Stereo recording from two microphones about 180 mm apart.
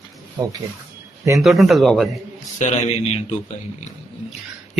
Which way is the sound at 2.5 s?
40° left (ahead or behind).